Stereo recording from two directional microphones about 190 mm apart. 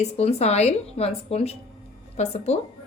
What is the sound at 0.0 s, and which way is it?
A woman's voice, 35° left (ahead or behind).